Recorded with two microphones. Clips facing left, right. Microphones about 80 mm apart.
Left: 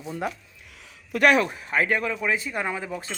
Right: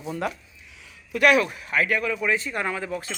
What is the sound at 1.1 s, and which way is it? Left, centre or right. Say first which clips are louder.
Speech: even; left.